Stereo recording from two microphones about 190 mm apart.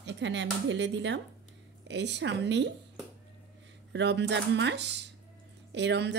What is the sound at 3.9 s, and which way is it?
Speech, 65° right (ahead or behind).